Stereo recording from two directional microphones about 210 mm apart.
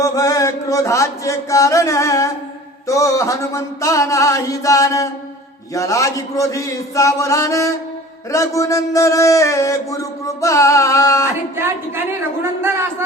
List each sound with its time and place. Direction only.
0.0 s chant: 15° left (ahead or behind)
2.8 s a sound: 15° left (ahead or behind)
11.5 s speech: 10° right (ahead or behind)